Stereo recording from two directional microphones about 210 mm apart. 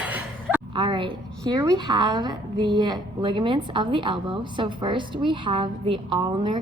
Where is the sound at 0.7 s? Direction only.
25° right (ahead or behind).